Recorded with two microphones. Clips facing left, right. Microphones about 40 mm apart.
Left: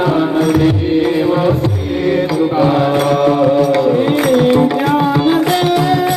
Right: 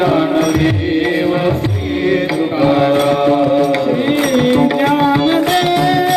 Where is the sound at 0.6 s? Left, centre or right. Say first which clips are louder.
Left 2 dB; right.